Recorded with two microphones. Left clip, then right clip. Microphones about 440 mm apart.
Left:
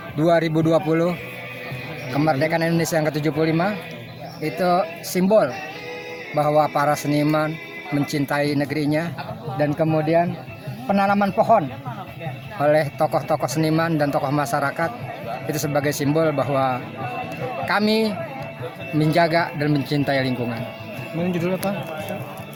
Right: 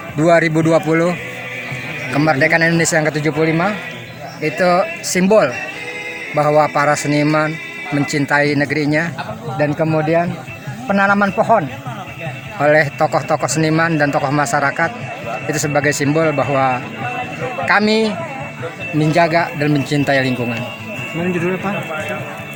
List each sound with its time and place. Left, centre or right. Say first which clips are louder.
0.2 s a man's voice: right 6 dB; left
2.1 s a man's voice: right 7 dB; left